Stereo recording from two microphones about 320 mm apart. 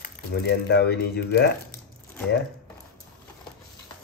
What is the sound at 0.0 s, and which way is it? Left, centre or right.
Speech, left.